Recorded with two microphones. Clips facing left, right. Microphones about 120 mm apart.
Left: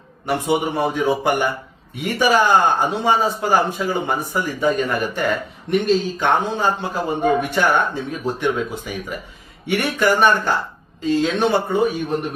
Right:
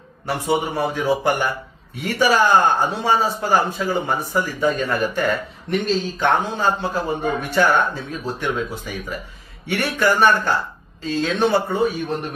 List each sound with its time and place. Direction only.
0.3 s speech: 20° left (ahead or behind)